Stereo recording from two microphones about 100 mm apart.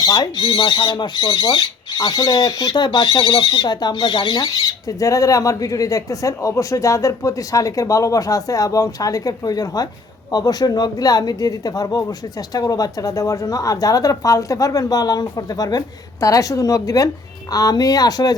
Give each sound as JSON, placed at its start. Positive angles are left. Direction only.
{"t": 0.0, "sound": "speech", "side_deg": 40}